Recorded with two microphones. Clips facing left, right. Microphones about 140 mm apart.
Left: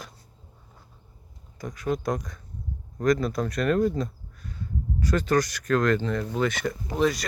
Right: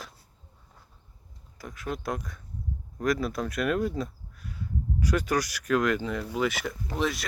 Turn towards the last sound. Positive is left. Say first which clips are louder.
# left 5 dB
turn(degrees=0)  # may be behind; listen again after turning